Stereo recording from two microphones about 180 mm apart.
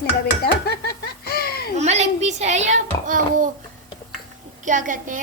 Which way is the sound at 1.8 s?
40° right (ahead or behind).